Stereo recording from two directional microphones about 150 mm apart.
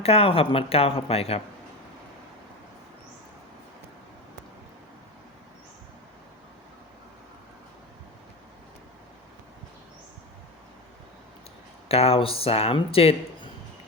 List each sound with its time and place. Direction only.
0.0 s speech: 40° left (ahead or behind)
11.9 s speech: 40° left (ahead or behind)